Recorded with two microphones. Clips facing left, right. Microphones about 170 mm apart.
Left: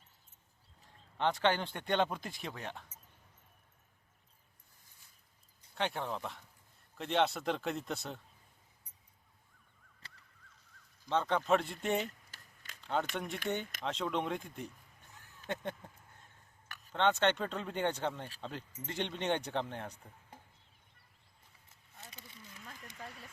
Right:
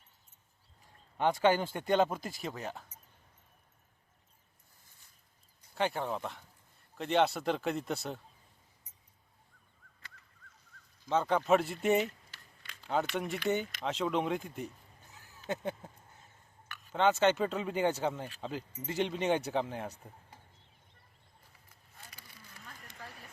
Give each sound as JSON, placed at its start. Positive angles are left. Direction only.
{"t": 1.2, "sound": "speech", "side_deg": -10}
{"t": 5.7, "sound": "speech", "side_deg": -5}
{"t": 11.1, "sound": "speech", "side_deg": -5}
{"t": 12.8, "sound": "a sound", "side_deg": -5}
{"t": 13.1, "sound": "speech", "side_deg": 0}
{"t": 16.9, "sound": "speech", "side_deg": -5}
{"t": 21.9, "sound": "a sound", "side_deg": 25}